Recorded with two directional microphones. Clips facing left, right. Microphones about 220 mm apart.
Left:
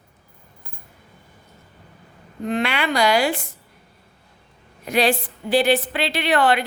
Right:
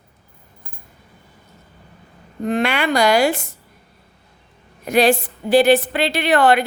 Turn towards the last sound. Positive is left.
turn(degrees=-45)  # may be behind; listen again after turning